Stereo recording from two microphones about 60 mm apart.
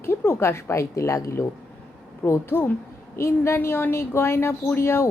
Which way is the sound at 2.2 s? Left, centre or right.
Left.